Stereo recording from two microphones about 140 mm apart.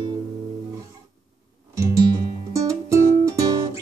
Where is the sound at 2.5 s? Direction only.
20° right (ahead or behind).